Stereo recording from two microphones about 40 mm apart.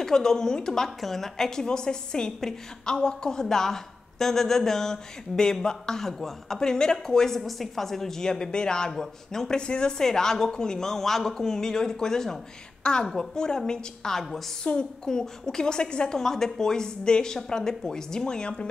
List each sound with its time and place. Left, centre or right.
0.0 s a woman's voice: centre
9.6 s speech: left
9.9 s a woman's voice: centre
13.3 s a woman's voice: centre
14.6 s a woman's voice: left
16.2 s a woman's voice: centre